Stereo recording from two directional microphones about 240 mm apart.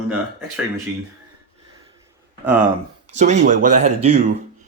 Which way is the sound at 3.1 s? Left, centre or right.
Right.